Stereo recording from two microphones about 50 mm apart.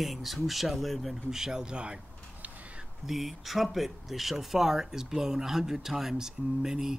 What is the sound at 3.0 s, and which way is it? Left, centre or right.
Speech, centre.